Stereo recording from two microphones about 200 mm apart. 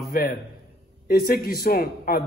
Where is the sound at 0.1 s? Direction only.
50° left (ahead or behind).